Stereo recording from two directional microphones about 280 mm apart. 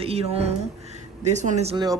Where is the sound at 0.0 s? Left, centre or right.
Right.